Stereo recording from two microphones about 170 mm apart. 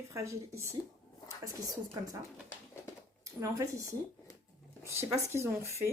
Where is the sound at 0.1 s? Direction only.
15° right (ahead or behind).